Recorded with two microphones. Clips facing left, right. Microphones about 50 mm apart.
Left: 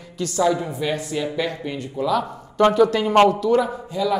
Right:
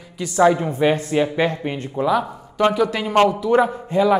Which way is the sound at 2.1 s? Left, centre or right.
Centre.